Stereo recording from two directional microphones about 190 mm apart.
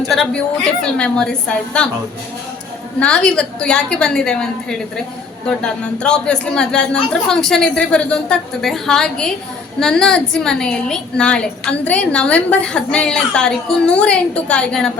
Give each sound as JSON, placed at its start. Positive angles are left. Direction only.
{"t": 0.8, "sound": "a woman's voice", "side_deg": 5}
{"t": 3.0, "sound": "a woman's voice", "side_deg": 5}